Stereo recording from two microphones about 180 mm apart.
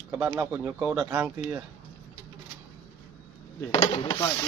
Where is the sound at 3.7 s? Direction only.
25° left (ahead or behind).